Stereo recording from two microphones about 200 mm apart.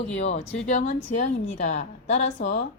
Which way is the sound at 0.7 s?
35° left (ahead or behind).